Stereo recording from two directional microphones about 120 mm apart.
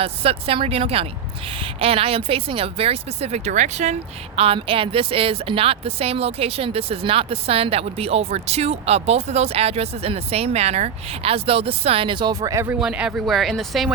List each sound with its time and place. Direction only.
0.0 s speech: 55° right (ahead or behind); by 3.9 s 75° right (ahead or behind)
4.4 s speech: 50° right (ahead or behind); by 12.6 s 30° right (ahead or behind)
12.6 s speech: 10° right (ahead or behind)